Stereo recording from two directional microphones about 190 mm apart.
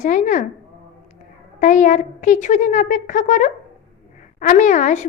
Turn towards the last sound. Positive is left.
turn(degrees=40)  # may be behind; listen again after turning